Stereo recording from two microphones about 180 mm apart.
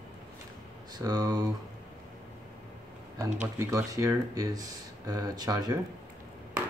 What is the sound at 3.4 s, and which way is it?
Speech, 15° right (ahead or behind).